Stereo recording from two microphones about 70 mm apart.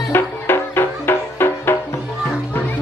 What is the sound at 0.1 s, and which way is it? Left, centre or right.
Music, left.